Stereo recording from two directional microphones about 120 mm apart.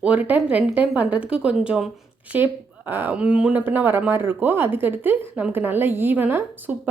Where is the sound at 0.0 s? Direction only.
10° right (ahead or behind).